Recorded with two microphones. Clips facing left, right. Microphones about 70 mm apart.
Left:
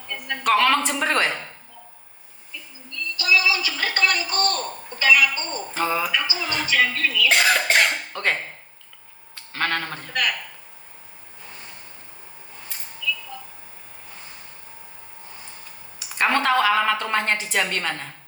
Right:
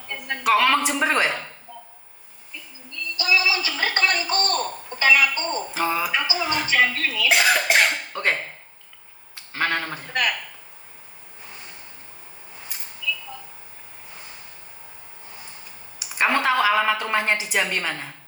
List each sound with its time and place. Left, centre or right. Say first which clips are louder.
0.3 s a woman's voice: even; centre
3.2 s a sound: left 1 dB; right
5.7 s speech: left 2 dB; centre
6.1 s speech: even; right
6.3 s speech: right 3 dB; centre
6.7 s speech: even; centre
7.3 s cough: right 1 dB; centre
9.3 s a sound: right 1 dB; centre
10.1 s speech: right 1 dB; right
16.0 s a woman's voice: even; centre